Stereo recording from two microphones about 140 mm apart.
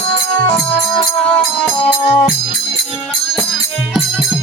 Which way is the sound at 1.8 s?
45° left (ahead or behind).